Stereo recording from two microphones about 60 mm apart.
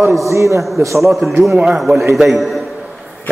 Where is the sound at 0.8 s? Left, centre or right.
Right.